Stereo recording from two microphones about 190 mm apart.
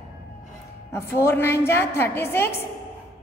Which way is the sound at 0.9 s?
15° left (ahead or behind).